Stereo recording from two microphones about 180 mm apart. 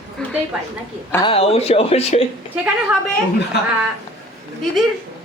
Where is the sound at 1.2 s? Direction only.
30° left (ahead or behind).